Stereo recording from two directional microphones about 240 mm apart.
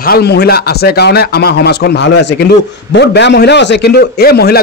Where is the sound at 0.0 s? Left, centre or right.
Left.